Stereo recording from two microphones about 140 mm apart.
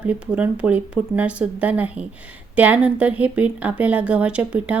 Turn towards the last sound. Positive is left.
turn(degrees=-10)  # may be behind; listen again after turning